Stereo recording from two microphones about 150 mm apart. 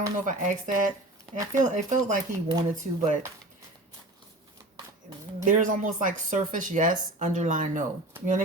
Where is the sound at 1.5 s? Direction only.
55° right (ahead or behind).